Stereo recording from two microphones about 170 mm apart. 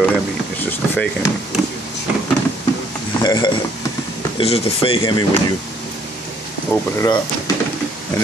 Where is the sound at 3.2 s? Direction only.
25° left (ahead or behind).